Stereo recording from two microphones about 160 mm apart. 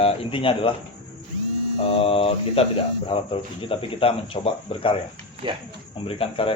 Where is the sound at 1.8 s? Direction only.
35° left (ahead or behind).